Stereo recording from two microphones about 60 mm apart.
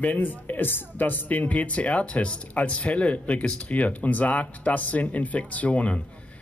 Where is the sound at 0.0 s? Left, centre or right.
Left.